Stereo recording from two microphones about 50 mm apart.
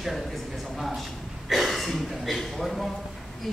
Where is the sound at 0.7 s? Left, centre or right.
Centre.